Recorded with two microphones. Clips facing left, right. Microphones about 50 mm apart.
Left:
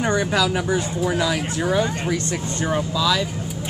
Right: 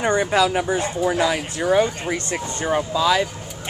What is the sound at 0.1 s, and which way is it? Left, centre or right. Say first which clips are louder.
Speech: right 4 dB; right.